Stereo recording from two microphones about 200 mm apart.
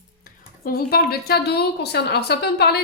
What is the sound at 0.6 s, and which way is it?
A woman's voice, 50° left (ahead or behind).